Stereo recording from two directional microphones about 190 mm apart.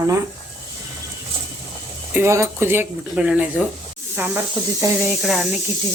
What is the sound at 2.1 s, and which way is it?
Speech, 15° right (ahead or behind).